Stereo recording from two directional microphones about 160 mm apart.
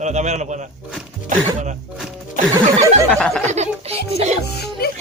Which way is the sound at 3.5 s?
45° right (ahead or behind).